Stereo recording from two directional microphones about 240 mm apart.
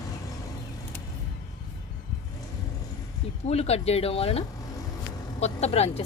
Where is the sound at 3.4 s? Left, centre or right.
Left.